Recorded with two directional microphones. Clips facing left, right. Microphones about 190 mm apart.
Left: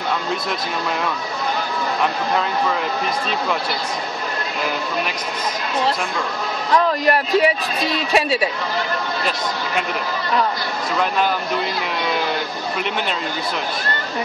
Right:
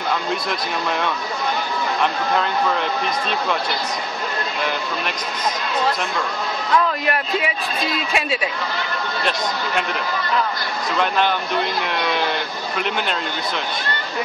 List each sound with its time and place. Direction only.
2.0 s speech: centre (ahead or behind)
7.1 s a man's voice: 35° left (ahead or behind)
11.0 s speech: centre (ahead or behind)